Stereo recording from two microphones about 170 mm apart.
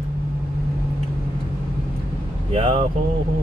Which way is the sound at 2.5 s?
30° right (ahead or behind).